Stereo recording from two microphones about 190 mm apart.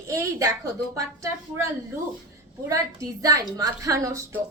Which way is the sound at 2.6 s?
15° right (ahead or behind).